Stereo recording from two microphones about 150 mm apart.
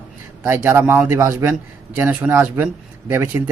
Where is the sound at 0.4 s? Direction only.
15° right (ahead or behind).